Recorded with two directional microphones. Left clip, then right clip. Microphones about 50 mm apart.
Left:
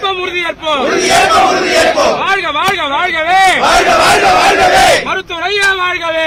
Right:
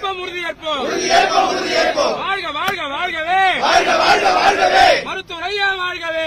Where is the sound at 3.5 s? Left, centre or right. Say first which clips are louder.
Left 6 dB; left.